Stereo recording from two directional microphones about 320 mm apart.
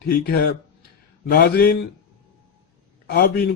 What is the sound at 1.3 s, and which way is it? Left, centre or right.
Mantra, left.